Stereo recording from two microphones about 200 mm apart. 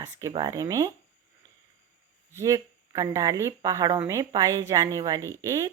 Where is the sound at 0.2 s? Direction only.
15° right (ahead or behind).